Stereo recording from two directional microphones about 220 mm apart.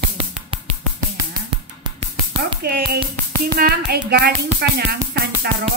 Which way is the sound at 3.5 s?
45° right (ahead or behind).